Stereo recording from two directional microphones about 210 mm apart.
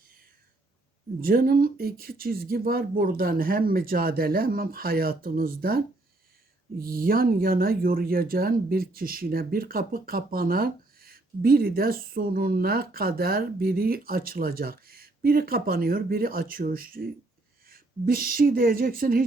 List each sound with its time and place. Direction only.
1.2 s speech: 45° right (ahead or behind)